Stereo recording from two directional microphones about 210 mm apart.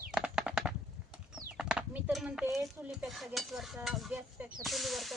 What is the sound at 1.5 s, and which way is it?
Speech, 5° right (ahead or behind).